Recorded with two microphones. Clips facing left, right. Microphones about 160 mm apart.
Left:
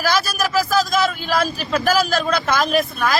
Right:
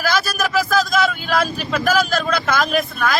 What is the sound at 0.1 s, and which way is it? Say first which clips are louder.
A man's voice: right 1 dB; centre (ahead or behind).